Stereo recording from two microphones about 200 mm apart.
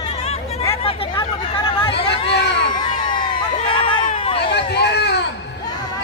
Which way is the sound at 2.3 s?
60° left (ahead or behind).